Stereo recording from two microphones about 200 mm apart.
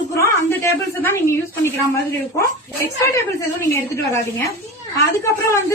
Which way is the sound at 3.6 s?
15° left (ahead or behind).